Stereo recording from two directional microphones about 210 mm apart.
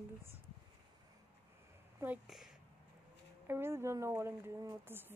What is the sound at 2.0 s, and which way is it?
Speech, 5° right (ahead or behind).